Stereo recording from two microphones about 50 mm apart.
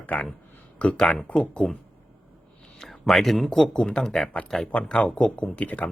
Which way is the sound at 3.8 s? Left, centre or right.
Centre.